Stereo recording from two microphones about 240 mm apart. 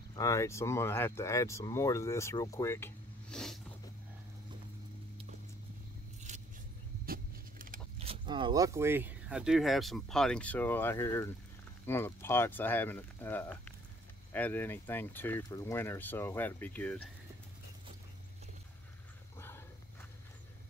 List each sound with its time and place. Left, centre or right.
0.1 s speech: centre
7.1 s a sound: right
8.1 s speech: centre
19.3 s wild animals: centre